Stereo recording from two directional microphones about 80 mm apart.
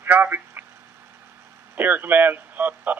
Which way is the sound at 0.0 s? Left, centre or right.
Right.